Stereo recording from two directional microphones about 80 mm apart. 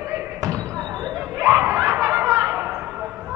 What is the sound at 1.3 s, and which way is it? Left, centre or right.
Snicker, right.